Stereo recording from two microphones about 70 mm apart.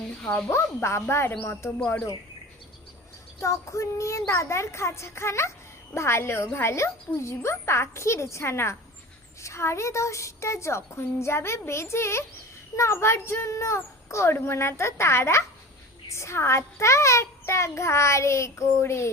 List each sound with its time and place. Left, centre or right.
0.5 s speech: left
3.4 s a child's voice: left